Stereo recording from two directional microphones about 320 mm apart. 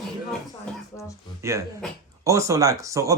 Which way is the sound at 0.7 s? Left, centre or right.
Centre.